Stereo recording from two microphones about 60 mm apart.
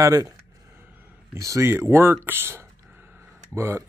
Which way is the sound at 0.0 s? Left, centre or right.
Right.